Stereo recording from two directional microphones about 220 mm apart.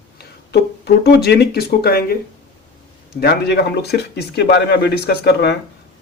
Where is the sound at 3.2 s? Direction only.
45° left (ahead or behind).